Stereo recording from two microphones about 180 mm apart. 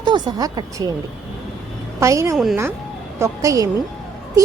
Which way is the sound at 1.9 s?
15° right (ahead or behind).